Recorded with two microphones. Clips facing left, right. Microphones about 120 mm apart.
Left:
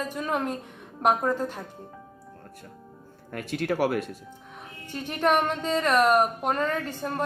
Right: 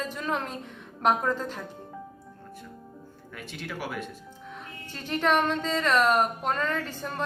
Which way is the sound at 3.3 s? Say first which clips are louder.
Left 10 dB; 60° left (ahead or behind).